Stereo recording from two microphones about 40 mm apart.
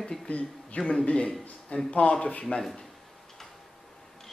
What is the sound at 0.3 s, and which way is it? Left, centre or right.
Speech, left.